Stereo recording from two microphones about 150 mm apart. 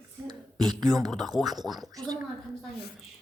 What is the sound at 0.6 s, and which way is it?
Speech, centre (ahead or behind).